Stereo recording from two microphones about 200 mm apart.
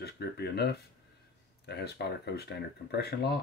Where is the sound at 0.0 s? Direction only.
55° left (ahead or behind).